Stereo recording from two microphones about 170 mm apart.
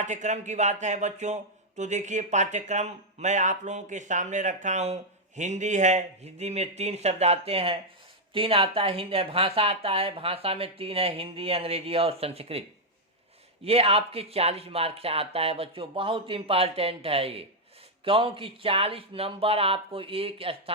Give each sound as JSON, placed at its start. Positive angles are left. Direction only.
{"t": 0.0, "sound": "speech", "side_deg": -45}
{"t": 13.7, "sound": "speech", "side_deg": -35}